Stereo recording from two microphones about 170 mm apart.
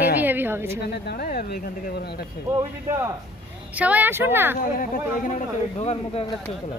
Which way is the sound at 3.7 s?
10° right (ahead or behind).